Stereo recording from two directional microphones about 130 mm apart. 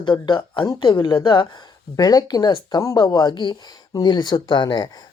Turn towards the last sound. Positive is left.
turn(degrees=35)  # may be behind; listen again after turning